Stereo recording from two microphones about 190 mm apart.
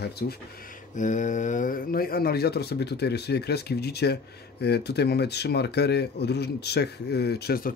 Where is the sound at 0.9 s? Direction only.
40° left (ahead or behind).